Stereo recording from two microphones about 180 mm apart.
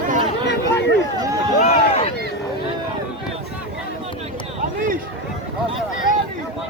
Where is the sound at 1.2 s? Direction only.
20° right (ahead or behind).